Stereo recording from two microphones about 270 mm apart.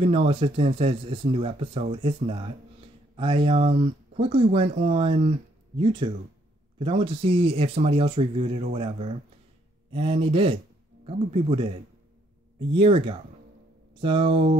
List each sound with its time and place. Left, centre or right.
0.0 s speech: right